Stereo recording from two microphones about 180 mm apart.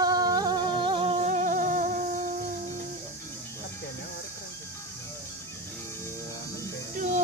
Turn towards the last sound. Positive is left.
turn(degrees=-45)  # may be behind; listen again after turning